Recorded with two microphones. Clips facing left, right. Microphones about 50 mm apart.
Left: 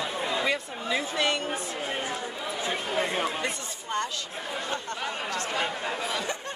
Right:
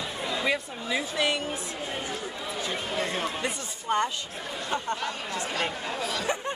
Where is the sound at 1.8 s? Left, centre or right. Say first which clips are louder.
Left 1 dB; left.